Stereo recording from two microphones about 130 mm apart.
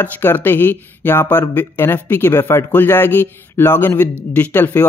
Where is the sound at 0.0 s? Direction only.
15° left (ahead or behind).